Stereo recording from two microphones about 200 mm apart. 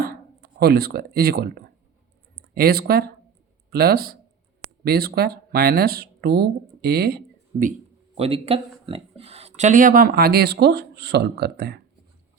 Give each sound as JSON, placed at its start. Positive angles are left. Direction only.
{"t": 0.0, "sound": "speech", "side_deg": -50}
{"t": 2.6, "sound": "speech", "side_deg": -50}
{"t": 8.1, "sound": "speech", "side_deg": -30}